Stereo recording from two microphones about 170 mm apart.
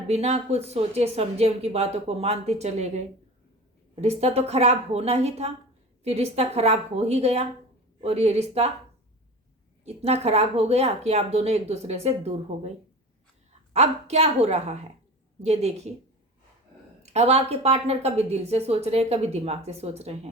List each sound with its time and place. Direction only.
0.1 s a woman's voice: 40° right (ahead or behind)
9.8 s a woman's voice: 40° right (ahead or behind)
13.7 s a woman's voice: 40° right (ahead or behind)
17.0 s a woman's voice: 40° right (ahead or behind)